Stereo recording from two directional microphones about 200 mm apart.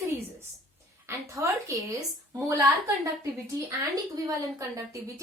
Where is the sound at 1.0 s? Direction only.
15° right (ahead or behind).